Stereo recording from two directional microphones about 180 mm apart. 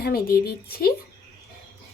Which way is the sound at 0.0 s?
55° left (ahead or behind).